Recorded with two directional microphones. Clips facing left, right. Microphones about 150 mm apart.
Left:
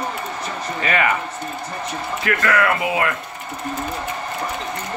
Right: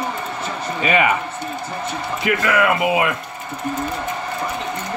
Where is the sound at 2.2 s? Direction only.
15° right (ahead or behind).